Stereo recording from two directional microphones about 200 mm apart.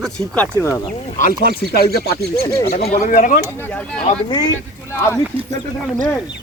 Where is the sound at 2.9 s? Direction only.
40° left (ahead or behind).